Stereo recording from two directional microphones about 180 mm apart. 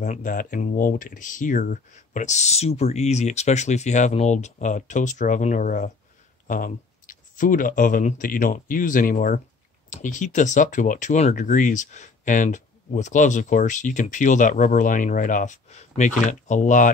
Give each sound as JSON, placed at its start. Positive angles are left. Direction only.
{"t": 0.0, "sound": "speech", "side_deg": 45}